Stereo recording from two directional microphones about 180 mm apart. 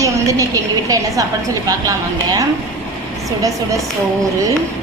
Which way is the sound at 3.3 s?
20° right (ahead or behind).